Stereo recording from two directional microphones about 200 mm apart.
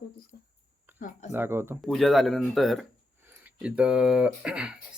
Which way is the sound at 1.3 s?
10° right (ahead or behind).